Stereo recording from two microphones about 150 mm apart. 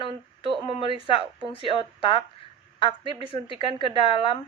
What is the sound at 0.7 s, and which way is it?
A woman's voice, 35° left (ahead or behind).